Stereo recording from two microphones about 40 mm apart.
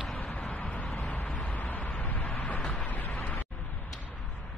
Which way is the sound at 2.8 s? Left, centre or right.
Left.